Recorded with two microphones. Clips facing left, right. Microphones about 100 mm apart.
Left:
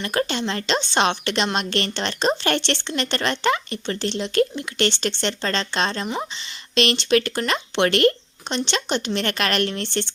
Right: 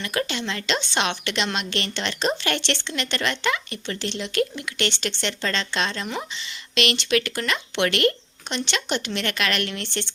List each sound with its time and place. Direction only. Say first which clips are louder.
0.0 s speech: left 3 dB; 35° left (ahead or behind)